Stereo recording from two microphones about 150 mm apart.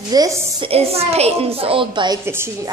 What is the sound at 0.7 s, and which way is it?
A woman's voice, 40° right (ahead or behind).